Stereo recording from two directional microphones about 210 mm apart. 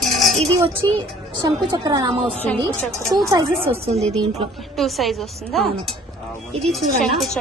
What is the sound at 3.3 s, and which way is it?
A woman's voice, 30° right (ahead or behind).